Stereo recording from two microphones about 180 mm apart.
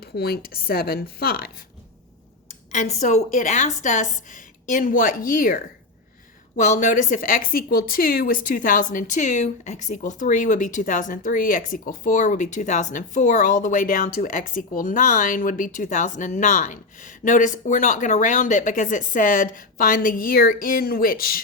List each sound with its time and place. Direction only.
0.0 s speech: 60° left (ahead or behind)
2.7 s a woman's voice: 40° left (ahead or behind)